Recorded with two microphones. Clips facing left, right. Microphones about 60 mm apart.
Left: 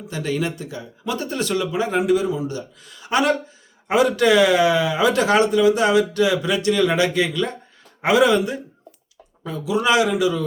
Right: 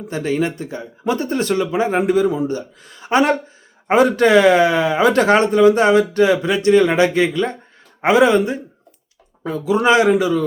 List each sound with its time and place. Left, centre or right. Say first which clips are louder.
0.1 s speech: right 4 dB; right